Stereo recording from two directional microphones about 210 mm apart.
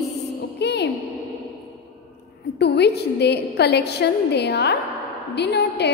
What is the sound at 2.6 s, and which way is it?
A woman's voice, 50° left (ahead or behind).